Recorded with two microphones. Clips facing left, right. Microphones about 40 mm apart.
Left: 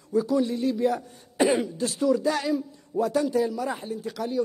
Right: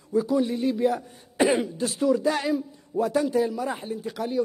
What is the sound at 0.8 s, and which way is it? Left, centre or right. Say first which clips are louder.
Speech: right 1 dB; centre.